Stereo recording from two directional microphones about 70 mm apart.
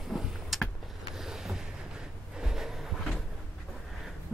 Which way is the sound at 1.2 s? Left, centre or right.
Centre.